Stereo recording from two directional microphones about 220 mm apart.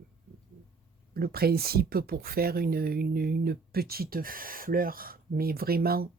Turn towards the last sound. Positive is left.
turn(degrees=-45)  # may be behind; listen again after turning